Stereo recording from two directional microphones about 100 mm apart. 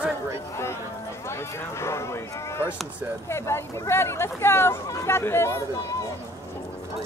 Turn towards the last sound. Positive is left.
turn(degrees=25)  # may be behind; listen again after turning